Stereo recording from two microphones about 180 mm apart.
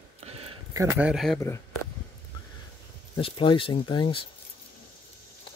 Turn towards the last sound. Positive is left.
turn(degrees=25)  # may be behind; listen again after turning